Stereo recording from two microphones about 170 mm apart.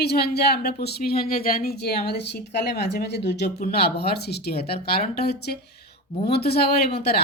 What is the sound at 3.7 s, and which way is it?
Speech, 70° left (ahead or behind).